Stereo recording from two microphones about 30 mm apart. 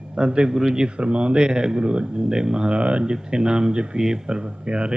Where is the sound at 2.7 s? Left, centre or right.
Right.